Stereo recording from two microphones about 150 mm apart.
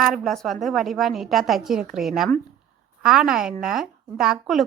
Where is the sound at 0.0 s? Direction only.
Centre (ahead or behind).